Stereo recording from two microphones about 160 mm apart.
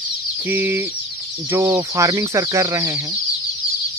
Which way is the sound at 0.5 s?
15° right (ahead or behind).